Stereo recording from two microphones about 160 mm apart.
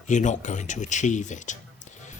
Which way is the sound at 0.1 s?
50° left (ahead or behind).